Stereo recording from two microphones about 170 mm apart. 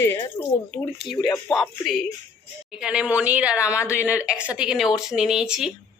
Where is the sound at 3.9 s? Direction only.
15° left (ahead or behind).